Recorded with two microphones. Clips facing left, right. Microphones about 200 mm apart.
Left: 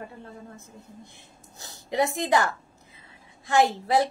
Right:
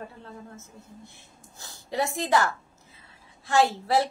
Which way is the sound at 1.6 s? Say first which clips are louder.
Left 3 dB; 20° left (ahead or behind).